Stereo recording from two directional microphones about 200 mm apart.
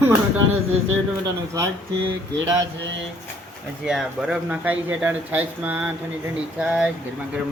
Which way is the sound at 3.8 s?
Centre (ahead or behind).